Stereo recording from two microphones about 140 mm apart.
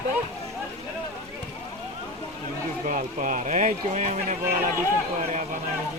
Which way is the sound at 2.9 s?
65° right (ahead or behind).